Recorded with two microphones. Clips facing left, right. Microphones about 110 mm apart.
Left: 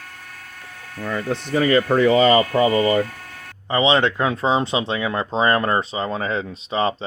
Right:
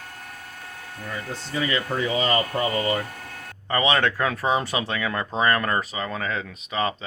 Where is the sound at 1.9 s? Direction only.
70° left (ahead or behind); by 2.6 s 90° left.